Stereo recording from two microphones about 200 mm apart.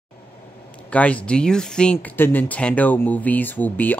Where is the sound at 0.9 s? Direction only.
5° left (ahead or behind).